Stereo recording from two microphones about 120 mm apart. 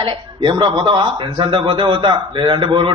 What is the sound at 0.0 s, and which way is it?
A man's voice, 45° right (ahead or behind).